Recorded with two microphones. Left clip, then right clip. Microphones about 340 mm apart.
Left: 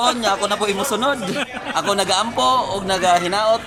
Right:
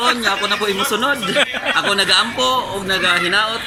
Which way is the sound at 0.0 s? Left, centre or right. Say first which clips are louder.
Right 1 dB; centre.